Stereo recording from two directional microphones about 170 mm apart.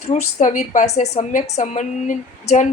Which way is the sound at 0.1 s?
45° left (ahead or behind).